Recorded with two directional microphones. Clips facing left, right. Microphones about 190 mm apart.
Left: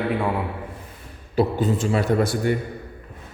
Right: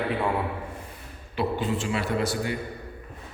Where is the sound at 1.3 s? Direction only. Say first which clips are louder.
Left 6 dB; 40° left (ahead or behind).